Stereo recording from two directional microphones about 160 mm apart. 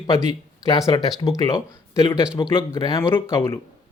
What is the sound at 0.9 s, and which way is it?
A man's voice, 25° left (ahead or behind).